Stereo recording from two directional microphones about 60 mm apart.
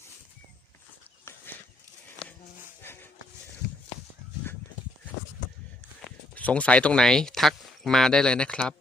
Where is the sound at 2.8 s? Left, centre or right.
Left.